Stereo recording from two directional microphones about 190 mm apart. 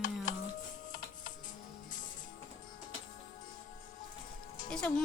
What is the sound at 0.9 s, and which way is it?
Music, 45° left (ahead or behind).